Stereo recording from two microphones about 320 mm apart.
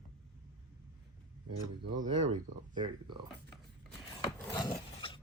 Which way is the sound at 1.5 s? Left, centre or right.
Right.